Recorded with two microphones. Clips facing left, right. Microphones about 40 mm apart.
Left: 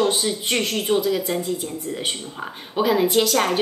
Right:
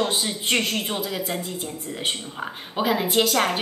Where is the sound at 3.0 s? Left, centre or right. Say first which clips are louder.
Left 3 dB; centre.